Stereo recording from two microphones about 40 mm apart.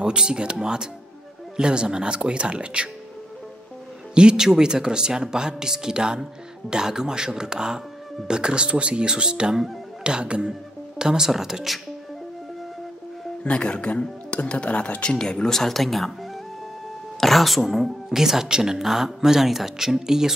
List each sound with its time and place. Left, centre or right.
0.0 s speech: right
4.1 s speech: right
13.4 s speech: left
15.1 s speech: centre
17.2 s speech: centre